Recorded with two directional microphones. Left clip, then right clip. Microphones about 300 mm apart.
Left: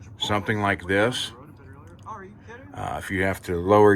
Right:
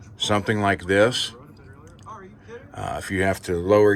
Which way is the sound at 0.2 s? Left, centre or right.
Centre.